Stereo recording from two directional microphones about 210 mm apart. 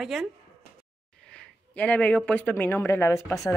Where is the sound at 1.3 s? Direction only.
5° left (ahead or behind).